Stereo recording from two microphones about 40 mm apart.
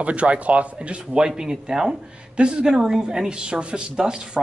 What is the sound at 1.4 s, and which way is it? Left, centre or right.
Speech, centre.